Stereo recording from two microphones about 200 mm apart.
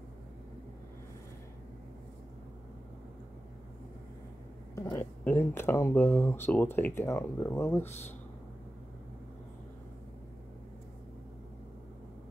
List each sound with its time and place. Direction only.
4.7 s speech: 15° left (ahead or behind)